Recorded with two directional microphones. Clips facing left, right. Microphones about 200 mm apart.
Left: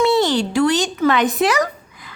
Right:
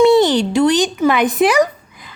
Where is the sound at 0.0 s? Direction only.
15° right (ahead or behind).